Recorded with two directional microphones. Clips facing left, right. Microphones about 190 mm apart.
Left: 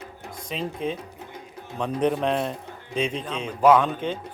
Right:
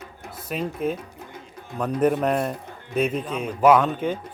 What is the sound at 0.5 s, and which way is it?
A man's voice, 5° right (ahead or behind).